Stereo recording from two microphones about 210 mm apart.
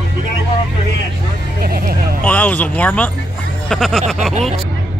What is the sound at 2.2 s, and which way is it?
Speech, 10° left (ahead or behind).